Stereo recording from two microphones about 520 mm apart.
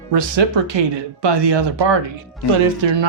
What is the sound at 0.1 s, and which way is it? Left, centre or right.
Speech, right.